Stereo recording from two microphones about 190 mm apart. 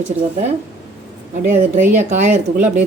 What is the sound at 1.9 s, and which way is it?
Speech, 40° right (ahead or behind).